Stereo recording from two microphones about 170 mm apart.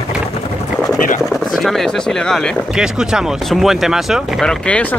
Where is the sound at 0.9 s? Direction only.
50° left (ahead or behind).